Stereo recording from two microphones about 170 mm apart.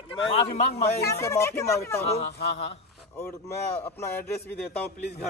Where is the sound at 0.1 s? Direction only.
35° left (ahead or behind).